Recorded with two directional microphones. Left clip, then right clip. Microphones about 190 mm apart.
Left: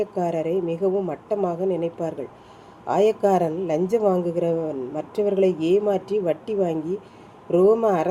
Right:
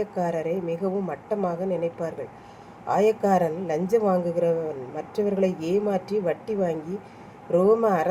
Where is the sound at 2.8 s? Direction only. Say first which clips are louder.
Left 2 dB; 50° left (ahead or behind).